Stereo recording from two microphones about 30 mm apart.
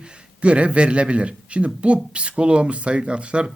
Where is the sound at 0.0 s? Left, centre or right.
Right.